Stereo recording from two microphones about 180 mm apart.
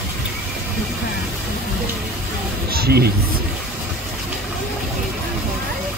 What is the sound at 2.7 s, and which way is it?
Speech, 60° right (ahead or behind).